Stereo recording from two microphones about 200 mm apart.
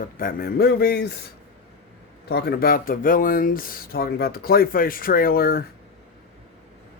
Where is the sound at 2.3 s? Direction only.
50° left (ahead or behind).